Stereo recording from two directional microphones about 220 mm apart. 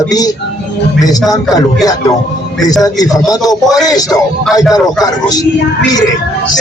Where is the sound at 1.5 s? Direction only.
15° left (ahead or behind).